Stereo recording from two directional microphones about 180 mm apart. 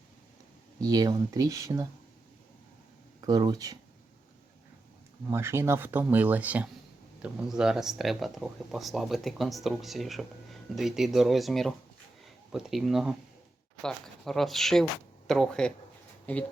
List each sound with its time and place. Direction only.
0.8 s speech: 20° right (ahead or behind)
3.2 s speech: 20° right (ahead or behind)
5.3 s speech: 15° right (ahead or behind); by 16.5 s 5° left (ahead or behind)